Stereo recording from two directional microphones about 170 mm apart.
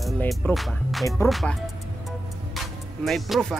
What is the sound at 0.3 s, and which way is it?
Music, centre (ahead or behind).